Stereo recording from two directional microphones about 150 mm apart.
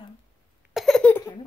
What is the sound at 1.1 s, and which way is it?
Laughter, 15° left (ahead or behind).